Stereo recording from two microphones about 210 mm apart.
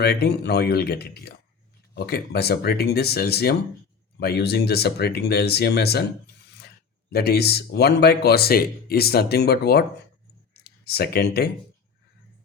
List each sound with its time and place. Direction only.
0.0 s speech: 50° left (ahead or behind)
7.1 s speech: 50° left (ahead or behind)
10.5 s a sound: 50° left (ahead or behind)